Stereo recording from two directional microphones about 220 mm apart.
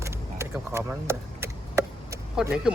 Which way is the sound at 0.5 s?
10° right (ahead or behind).